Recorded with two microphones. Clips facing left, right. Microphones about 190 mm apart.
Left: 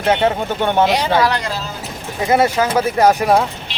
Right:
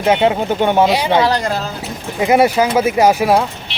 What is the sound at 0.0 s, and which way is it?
Speech, 10° right (ahead or behind).